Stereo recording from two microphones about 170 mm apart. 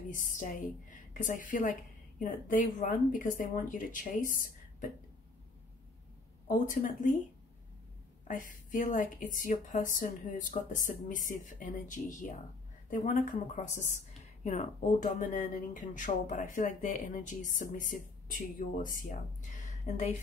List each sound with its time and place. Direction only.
0.1 s a woman's voice: 50° left (ahead or behind)
6.4 s a woman's voice: 55° left (ahead or behind)
8.3 s a woman's voice: 50° left (ahead or behind)
19.5 s a sound: 45° left (ahead or behind)